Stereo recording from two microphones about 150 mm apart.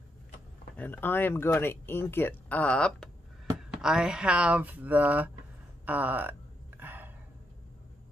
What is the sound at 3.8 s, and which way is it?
A woman's voice, 5° right (ahead or behind).